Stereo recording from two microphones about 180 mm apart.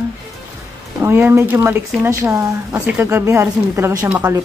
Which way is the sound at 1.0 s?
10° right (ahead or behind).